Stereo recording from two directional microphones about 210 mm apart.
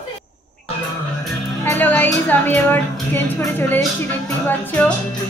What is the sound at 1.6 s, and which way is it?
A woman's voice, 10° left (ahead or behind).